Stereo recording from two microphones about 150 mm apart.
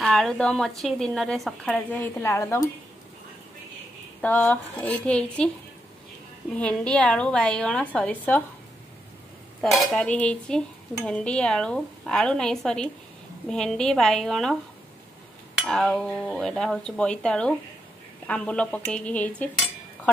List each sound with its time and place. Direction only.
0.0 s speech: centre (ahead or behind)
2.0 s a woman's voice: 20° left (ahead or behind)
4.2 s a woman's voice: 10° left (ahead or behind)
6.6 s a woman's voice: 5° left (ahead or behind)
9.6 s a woman's voice: centre (ahead or behind)